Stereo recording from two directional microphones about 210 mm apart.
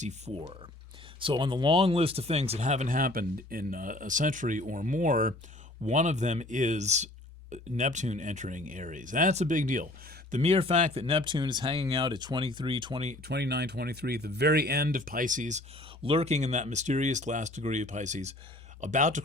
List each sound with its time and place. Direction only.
0.0 s speech: 30° right (ahead or behind)
10.3 s speech: 30° right (ahead or behind)
13.2 s speech: 55° right (ahead or behind); by 19.2 s 35° right (ahead or behind)